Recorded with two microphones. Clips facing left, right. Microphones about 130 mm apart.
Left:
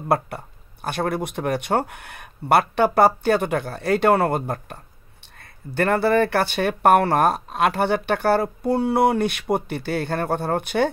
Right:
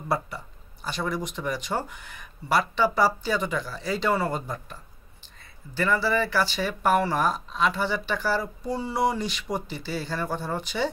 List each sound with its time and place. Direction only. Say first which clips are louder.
0.8 s speech: left 5 dB; 60° left (ahead or behind)